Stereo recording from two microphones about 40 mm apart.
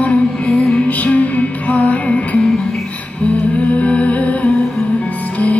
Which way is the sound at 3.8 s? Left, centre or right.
Left.